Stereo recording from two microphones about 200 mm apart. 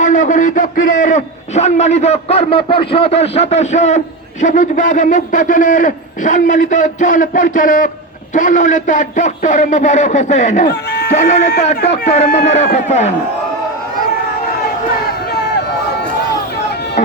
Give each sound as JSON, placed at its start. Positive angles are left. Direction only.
{"t": 0.0, "sound": "a man's voice", "side_deg": 40}
{"t": 10.7, "sound": "chicken", "side_deg": 55}
{"t": 11.2, "sound": "a man's voice", "side_deg": 35}